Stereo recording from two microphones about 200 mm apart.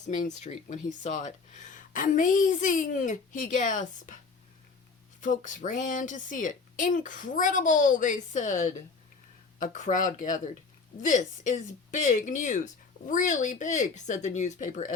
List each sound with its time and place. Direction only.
0.3 s speech: 35° left (ahead or behind)
5.2 s speech: 40° left (ahead or behind)